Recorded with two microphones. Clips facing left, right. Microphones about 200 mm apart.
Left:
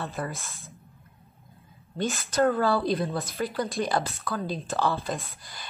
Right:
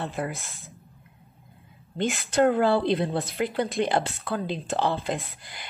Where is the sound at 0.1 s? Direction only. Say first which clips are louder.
Right 2 dB; 15° right (ahead or behind).